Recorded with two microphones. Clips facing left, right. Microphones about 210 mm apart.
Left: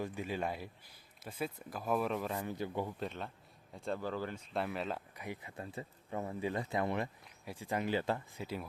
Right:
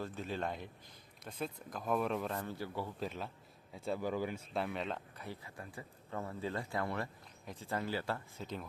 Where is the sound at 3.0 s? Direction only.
Centre (ahead or behind).